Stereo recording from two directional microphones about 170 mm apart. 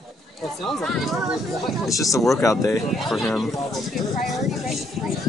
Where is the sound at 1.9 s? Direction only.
20° left (ahead or behind).